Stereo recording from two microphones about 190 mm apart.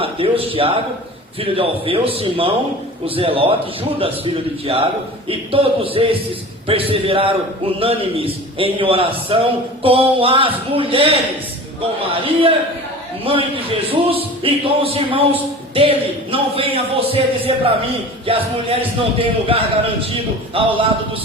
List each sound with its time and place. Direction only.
0.0 s a man's voice: 30° right (ahead or behind)